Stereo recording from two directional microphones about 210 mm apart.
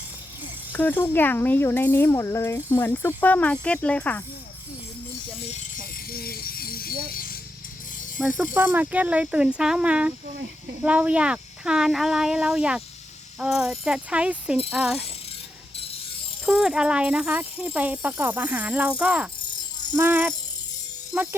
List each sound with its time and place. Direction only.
0.7 s speech: 10° left (ahead or behind)
5.4 s rattle: 35° left (ahead or behind)
8.2 s speech: centre (ahead or behind)
16.5 s speech: 5° right (ahead or behind)